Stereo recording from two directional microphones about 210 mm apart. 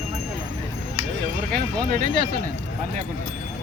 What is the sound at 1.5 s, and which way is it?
Speech, 40° right (ahead or behind).